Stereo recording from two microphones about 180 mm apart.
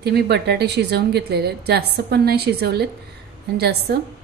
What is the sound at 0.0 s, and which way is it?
A woman's voice, 70° right (ahead or behind).